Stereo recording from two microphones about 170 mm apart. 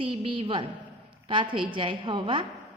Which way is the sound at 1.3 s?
30° right (ahead or behind).